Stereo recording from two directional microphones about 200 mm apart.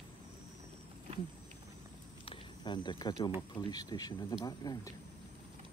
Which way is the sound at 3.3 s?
20° left (ahead or behind).